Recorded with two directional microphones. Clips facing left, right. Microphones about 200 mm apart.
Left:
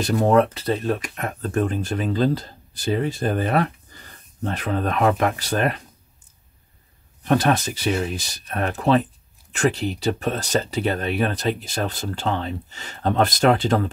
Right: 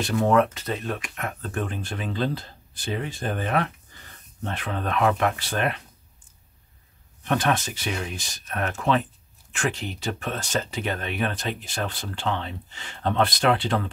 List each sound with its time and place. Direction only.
0.0 s speech: 40° left (ahead or behind)
7.2 s speech: 40° left (ahead or behind)